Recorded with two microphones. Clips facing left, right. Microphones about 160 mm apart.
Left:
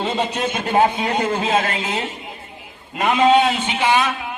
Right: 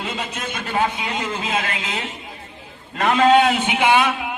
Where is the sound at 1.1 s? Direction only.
50° left (ahead or behind).